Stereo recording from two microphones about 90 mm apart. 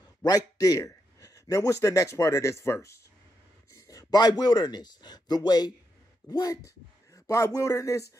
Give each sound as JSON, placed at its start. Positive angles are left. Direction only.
{"t": 0.2, "sound": "a man's voice", "side_deg": 45}